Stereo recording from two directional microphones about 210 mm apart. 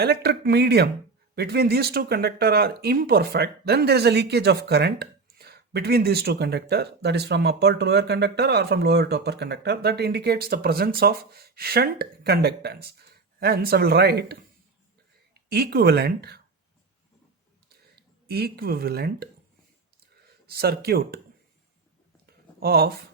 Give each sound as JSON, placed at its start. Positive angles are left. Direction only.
{"t": 0.0, "sound": "speech", "side_deg": -50}
{"t": 15.4, "sound": "speech", "side_deg": -50}
{"t": 17.9, "sound": "speech", "side_deg": -50}
{"t": 22.6, "sound": "speech", "side_deg": -45}